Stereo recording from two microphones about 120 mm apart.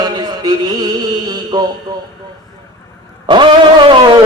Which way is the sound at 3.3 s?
40° right (ahead or behind).